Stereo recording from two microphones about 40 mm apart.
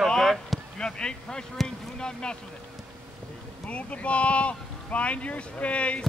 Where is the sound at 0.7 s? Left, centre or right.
Left.